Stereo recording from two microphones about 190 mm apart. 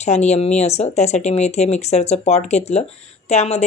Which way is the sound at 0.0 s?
35° left (ahead or behind).